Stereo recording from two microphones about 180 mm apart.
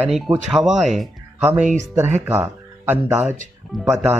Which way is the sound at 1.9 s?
10° right (ahead or behind).